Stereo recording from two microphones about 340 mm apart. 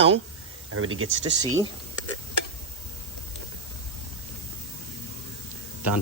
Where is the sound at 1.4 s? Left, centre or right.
Centre.